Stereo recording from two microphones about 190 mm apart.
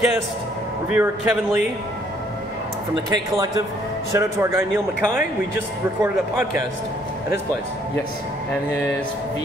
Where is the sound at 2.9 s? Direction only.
20° right (ahead or behind).